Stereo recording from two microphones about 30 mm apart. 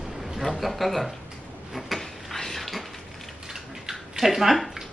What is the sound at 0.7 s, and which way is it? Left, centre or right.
Speech, centre.